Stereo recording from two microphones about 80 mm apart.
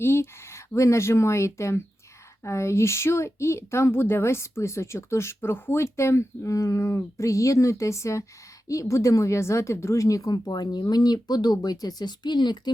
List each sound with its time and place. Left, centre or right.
0.0 s speech: left